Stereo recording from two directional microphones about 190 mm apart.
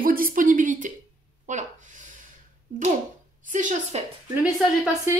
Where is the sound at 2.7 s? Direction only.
40° right (ahead or behind).